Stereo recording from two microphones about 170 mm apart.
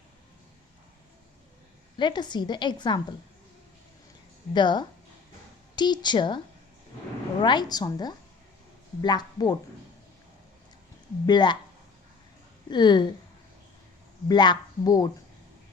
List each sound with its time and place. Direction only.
2.0 s a woman's voice: 25° left (ahead or behind)
4.5 s a woman's voice: 25° left (ahead or behind)
7.4 s a woman's voice: 25° left (ahead or behind)
11.3 s a woman's voice: 25° left (ahead or behind)
12.7 s a woman's voice: 25° left (ahead or behind)
14.3 s a woman's voice: 25° left (ahead or behind)